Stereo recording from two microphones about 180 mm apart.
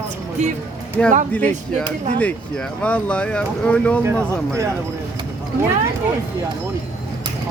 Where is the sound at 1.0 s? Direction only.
5° left (ahead or behind).